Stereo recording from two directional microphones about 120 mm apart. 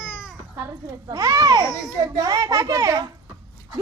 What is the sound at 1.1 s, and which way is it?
A child's voice, 30° right (ahead or behind).